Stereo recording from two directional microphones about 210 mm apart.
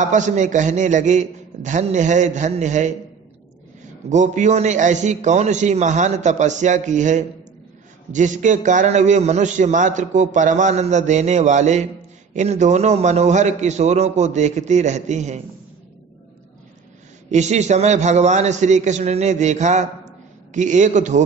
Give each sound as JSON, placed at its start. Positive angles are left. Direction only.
{"t": 0.0, "sound": "a man's voice", "side_deg": -35}
{"t": 4.1, "sound": "a man's voice", "side_deg": -35}
{"t": 17.3, "sound": "a man's voice", "side_deg": -35}